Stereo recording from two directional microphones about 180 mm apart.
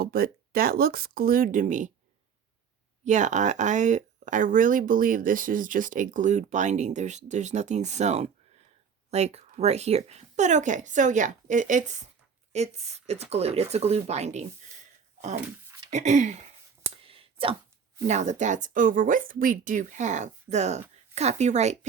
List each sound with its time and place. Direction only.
0.0 s speech: 55° right (ahead or behind)
3.0 s speech: 40° right (ahead or behind)
15.9 s speech: 40° right (ahead or behind)
16.8 s a sound: 30° right (ahead or behind)
18.1 s speech: 40° right (ahead or behind)